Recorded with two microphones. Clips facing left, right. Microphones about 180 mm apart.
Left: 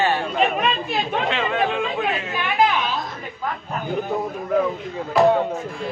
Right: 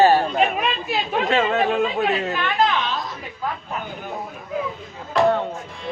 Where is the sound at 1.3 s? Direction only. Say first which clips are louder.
Right 6 dB; 45° right (ahead or behind).